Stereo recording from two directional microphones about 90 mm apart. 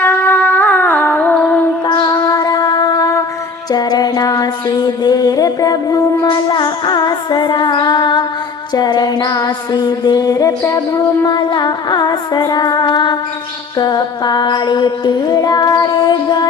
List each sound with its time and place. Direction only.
0.0 s music: 25° left (ahead or behind)
1.9 s music: 45° left (ahead or behind)
3.7 s a sound: 50° left (ahead or behind)
6.2 s female singing: 55° left (ahead or behind); by 11.3 s 40° left (ahead or behind)
11.5 s female singing: 50° left (ahead or behind)